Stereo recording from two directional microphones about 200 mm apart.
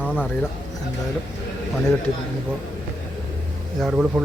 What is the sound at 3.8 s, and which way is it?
Speech, 5° right (ahead or behind).